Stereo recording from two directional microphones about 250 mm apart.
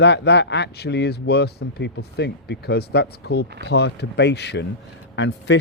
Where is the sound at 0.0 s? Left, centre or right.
Left.